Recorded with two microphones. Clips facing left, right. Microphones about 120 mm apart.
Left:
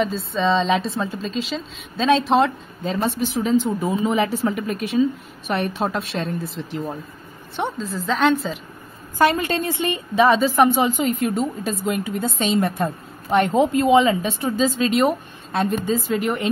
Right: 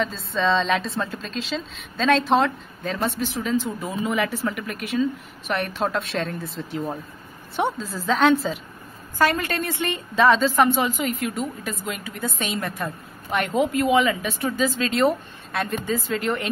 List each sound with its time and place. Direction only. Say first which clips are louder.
0.0 s a woman's voice: left 3 dB; 10° left (ahead or behind)
2.8 s a woman's voice: left 3 dB; 15° left (ahead or behind)
5.5 s a woman's voice: left 2 dB; 15° left (ahead or behind); by 8.5 s centre (ahead or behind)
9.2 s a woman's voice: left 3 dB; 20° left (ahead or behind)
11.1 s a woman's voice: left 5 dB; 30° left (ahead or behind)